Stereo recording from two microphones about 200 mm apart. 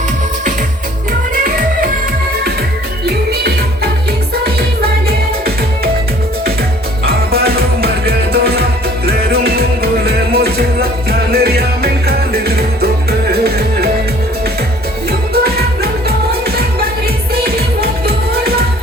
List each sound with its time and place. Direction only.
4.8 s music: 50° right (ahead or behind)
7.0 s music: 50° right (ahead or behind)
15.3 s music: 50° right (ahead or behind)